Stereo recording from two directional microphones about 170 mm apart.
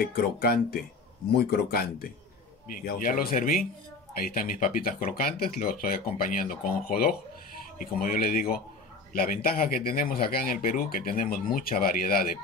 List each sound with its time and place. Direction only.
0.0 s speech: 65° left (ahead or behind)